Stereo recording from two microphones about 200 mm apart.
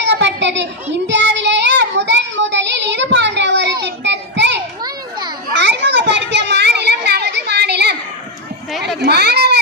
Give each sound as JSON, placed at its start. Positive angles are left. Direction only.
{"t": 0.0, "sound": "children playing", "side_deg": -60}
{"t": 1.0, "sound": "child singing", "side_deg": -65}
{"t": 5.5, "sound": "children playing", "side_deg": -60}
{"t": 9.0, "sound": "children playing", "side_deg": -55}